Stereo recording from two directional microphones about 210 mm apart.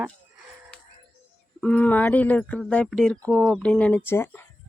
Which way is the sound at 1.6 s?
5° left (ahead or behind).